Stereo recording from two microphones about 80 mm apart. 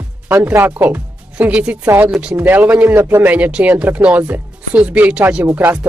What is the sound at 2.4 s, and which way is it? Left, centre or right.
Speech, right.